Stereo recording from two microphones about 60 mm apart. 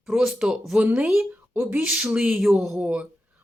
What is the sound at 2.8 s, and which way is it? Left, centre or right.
Speech, right.